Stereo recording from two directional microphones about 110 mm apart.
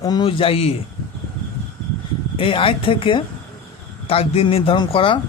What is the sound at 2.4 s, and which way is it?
Speech, 55° left (ahead or behind).